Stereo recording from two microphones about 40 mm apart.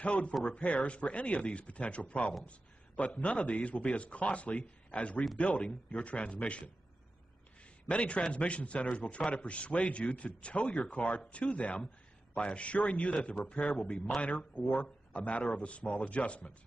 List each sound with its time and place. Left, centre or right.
0.0 s a man's voice: left
7.9 s a man's voice: left